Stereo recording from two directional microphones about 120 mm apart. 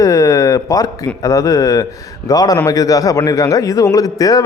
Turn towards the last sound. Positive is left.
turn(degrees=30)  # may be behind; listen again after turning